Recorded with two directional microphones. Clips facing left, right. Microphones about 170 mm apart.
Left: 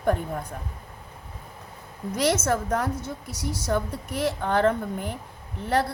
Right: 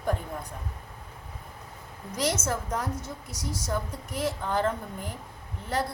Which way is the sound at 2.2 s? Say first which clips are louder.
Left 5 dB; 65° left (ahead or behind).